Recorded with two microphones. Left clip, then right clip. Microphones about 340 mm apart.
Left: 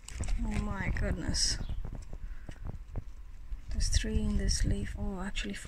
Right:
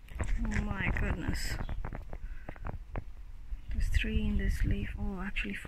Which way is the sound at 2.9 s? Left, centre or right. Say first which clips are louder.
Right 6 dB; right.